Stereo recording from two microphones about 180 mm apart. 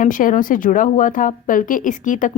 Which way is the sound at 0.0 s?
45° left (ahead or behind).